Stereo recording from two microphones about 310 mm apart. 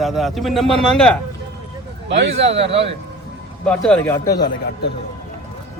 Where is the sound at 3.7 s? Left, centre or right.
Centre.